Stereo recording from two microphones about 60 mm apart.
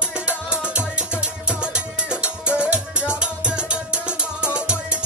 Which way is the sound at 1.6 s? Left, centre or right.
Centre.